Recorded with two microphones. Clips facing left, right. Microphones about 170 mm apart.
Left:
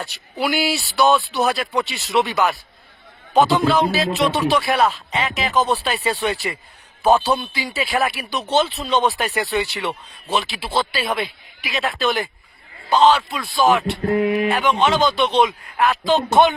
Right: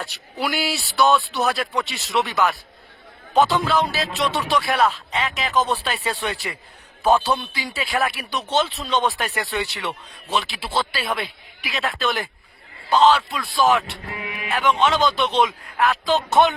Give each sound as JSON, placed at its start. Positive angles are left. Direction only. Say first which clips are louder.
{"t": 0.0, "sound": "speech", "louder": "left 3 dB", "side_deg": 0}
{"t": 14.0, "sound": "a sound", "louder": "left 15 dB", "side_deg": 45}
{"t": 14.5, "sound": "speech", "louder": "left 2 dB", "side_deg": 0}